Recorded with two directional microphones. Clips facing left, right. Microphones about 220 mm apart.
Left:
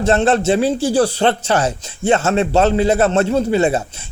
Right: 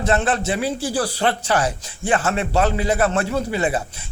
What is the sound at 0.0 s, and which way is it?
Speech, 25° left (ahead or behind).